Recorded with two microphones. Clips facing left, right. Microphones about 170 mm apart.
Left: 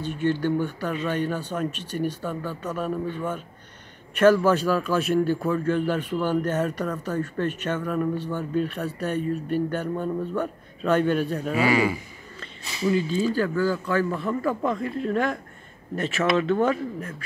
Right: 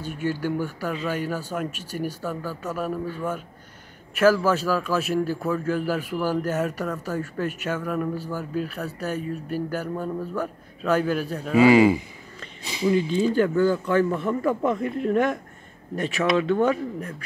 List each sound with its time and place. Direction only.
0.0 s speech: 10° right (ahead or behind)
11.5 s speech: 25° right (ahead or behind)